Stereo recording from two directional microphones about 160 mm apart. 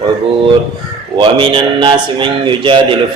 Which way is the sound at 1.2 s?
30° right (ahead or behind).